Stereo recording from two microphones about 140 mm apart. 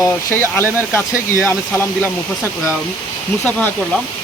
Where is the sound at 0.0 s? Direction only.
20° left (ahead or behind).